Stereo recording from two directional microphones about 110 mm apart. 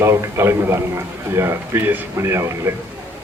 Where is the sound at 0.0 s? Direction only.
25° right (ahead or behind).